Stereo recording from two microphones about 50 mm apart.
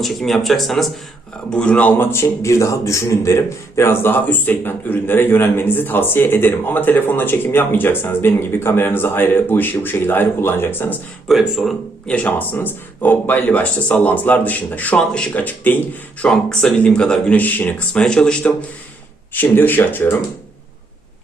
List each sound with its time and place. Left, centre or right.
0.0 s speech: centre
1.5 s speech: left
2.0 s speech: left
2.2 s a man's voice: left
4.3 s speech: left
11.3 s speech: centre
12.0 s speech: left
14.9 s speech: centre
15.3 s speech: left
16.3 s speech: centre
17.3 s speech: left
17.9 s speech: centre
19.3 s speech: left